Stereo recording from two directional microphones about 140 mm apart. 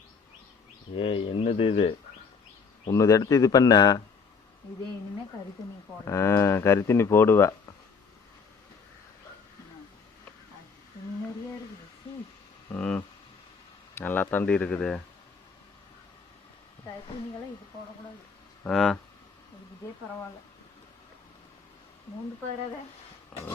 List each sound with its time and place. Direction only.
0.9 s speech: 40° left (ahead or behind)
2.9 s speech: 20° left (ahead or behind)
6.1 s speech: 20° left (ahead or behind)
12.7 s speech: 10° left (ahead or behind)
18.7 s speech: centre (ahead or behind)
23.3 s horse: 5° left (ahead or behind)